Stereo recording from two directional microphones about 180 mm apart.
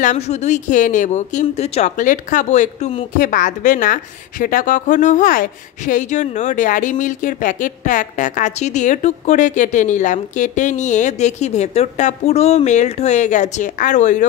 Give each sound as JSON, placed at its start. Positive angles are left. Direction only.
{"t": 0.0, "sound": "speech", "side_deg": 40}